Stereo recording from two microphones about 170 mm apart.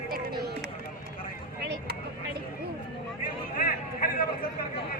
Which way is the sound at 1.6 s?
90° right.